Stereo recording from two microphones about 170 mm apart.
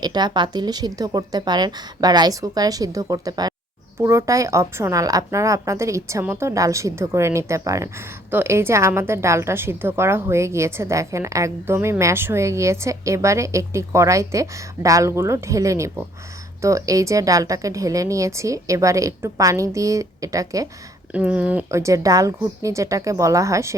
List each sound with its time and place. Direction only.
0.0 s a woman's voice: 25° right (ahead or behind)
21.1 s a woman's voice: 5° right (ahead or behind)